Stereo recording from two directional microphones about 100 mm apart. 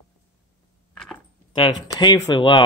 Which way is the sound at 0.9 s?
5° left (ahead or behind).